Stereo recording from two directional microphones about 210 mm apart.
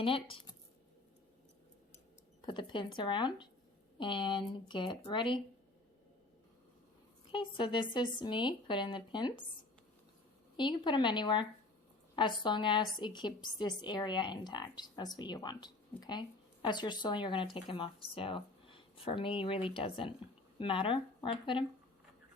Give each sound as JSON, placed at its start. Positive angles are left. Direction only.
{"t": 0.0, "sound": "a woman's voice", "side_deg": 25}
{"t": 2.5, "sound": "a woman's voice", "side_deg": 20}
{"t": 7.3, "sound": "a woman's voice", "side_deg": 20}
{"t": 10.6, "sound": "a woman's voice", "side_deg": 20}